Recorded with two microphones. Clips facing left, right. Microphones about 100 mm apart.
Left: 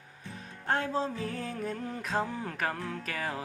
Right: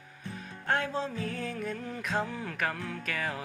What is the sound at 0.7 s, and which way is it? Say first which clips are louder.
Music: left 1 dB; 35° left (ahead or behind).